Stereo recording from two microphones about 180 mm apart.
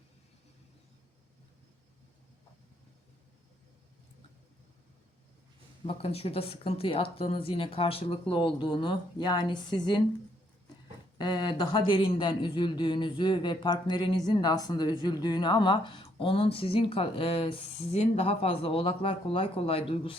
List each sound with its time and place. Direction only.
5.8 s speech: 30° left (ahead or behind)
11.2 s speech: 25° left (ahead or behind)